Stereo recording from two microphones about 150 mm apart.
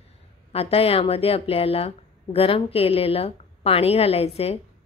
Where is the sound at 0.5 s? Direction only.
40° left (ahead or behind).